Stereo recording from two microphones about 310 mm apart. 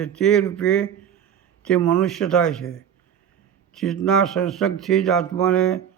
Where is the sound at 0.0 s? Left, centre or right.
Centre.